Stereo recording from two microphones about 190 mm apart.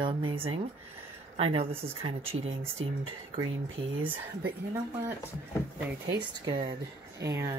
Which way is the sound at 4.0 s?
10° right (ahead or behind).